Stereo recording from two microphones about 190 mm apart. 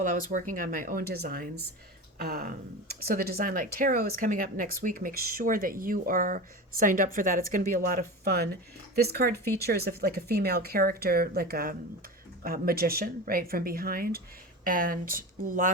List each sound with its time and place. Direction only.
0.0 s speech: 45° right (ahead or behind)
2.1 s a sound: 55° right (ahead or behind)
3.1 s speech: 50° right (ahead or behind)